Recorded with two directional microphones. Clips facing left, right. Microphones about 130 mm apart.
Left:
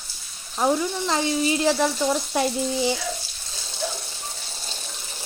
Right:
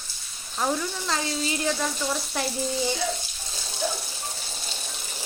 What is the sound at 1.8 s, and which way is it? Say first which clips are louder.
Frying: left 6 dB; 35° left (ahead or behind).